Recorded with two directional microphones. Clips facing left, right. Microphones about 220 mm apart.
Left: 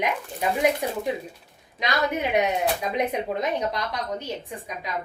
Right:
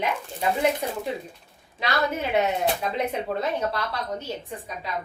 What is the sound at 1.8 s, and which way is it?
Speech, 15° left (ahead or behind).